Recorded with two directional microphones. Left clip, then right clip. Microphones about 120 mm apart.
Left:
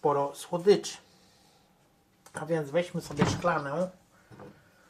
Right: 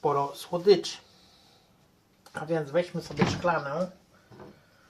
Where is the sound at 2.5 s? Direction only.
25° left (ahead or behind).